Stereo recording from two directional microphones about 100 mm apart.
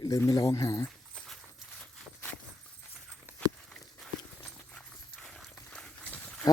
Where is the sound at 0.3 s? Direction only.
35° left (ahead or behind).